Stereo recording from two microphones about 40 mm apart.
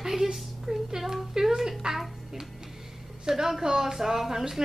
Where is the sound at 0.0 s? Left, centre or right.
Centre.